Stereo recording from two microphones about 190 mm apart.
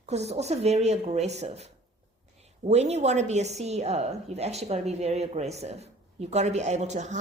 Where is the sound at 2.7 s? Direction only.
35° right (ahead or behind).